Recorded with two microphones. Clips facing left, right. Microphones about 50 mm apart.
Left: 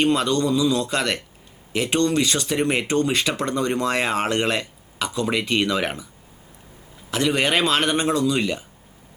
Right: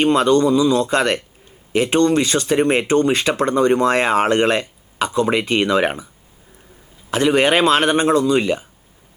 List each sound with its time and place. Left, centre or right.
0.0 s speech: centre
0.9 s speech: right
1.7 s speech: centre
7.1 s speech: centre